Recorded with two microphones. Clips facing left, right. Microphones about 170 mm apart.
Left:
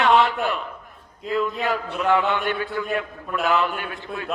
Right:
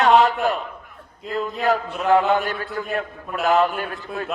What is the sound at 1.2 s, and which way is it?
Speech, centre (ahead or behind).